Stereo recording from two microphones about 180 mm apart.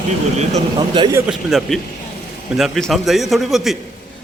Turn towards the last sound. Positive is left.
turn(degrees=0)  # may be behind; listen again after turning